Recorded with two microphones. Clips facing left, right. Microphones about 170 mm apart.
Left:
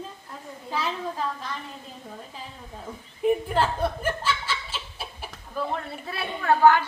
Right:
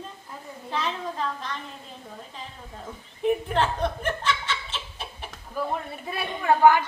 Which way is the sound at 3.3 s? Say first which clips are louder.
Left 1 dB; 5° left (ahead or behind).